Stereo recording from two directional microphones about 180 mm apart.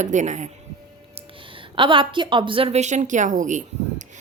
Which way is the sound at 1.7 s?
30° right (ahead or behind).